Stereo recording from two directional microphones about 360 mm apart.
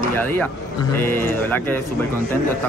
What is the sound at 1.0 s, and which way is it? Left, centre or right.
Speech, centre.